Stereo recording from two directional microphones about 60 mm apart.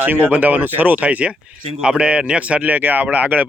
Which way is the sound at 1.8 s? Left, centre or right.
Centre.